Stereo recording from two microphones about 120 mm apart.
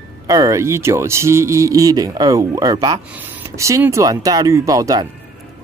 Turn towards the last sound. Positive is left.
turn(degrees=-30)  # may be behind; listen again after turning